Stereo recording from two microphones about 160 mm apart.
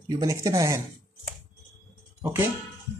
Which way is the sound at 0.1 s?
20° right (ahead or behind).